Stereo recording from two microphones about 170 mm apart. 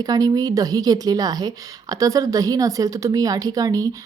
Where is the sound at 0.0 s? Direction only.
20° right (ahead or behind).